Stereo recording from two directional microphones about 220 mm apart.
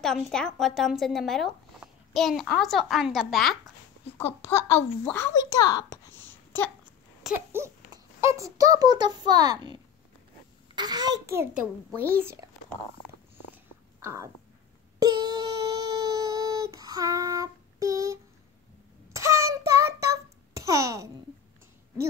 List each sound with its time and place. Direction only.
0.0 s a child's voice: 5° left (ahead or behind)
4.5 s a child's voice: 10° left (ahead or behind)
7.2 s a child's voice: 10° right (ahead or behind)
14.0 s a child's voice: 15° right (ahead or behind)
15.0 s a sound: 20° right (ahead or behind)
16.7 s child singing: 15° right (ahead or behind)